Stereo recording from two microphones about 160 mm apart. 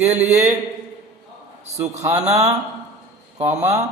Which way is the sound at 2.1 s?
45° right (ahead or behind).